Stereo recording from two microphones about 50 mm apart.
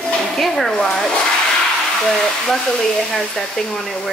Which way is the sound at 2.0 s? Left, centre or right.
Centre.